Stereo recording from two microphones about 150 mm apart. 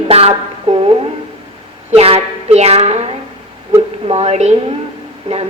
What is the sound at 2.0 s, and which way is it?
Speech, 45° right (ahead or behind).